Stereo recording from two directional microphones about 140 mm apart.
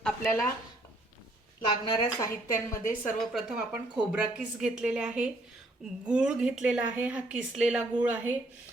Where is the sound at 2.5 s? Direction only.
75° left (ahead or behind).